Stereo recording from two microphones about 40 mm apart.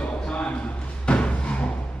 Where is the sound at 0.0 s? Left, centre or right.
Left.